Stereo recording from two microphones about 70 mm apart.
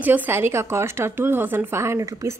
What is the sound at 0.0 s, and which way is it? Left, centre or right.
A woman's voice, right.